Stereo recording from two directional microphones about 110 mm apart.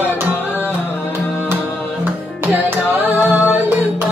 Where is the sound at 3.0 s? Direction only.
15° right (ahead or behind).